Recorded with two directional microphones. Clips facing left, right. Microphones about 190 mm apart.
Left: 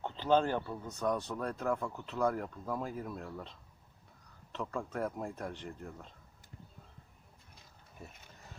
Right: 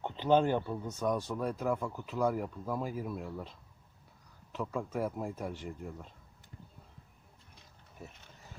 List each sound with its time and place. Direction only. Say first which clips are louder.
0.0 s speech: right 2 dB; 15° right (ahead or behind)
4.5 s speech: right 2 dB; 5° right (ahead or behind)